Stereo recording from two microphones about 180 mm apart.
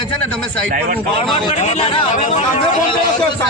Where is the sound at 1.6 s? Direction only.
35° left (ahead or behind).